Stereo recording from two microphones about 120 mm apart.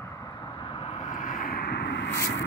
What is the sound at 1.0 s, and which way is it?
Vehicle, 90° left.